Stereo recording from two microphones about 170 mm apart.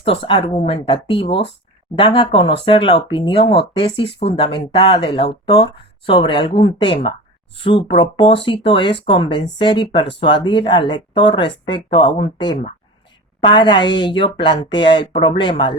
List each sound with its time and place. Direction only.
0.0 s speech: 35° left (ahead or behind)
6.1 s speech: 30° left (ahead or behind)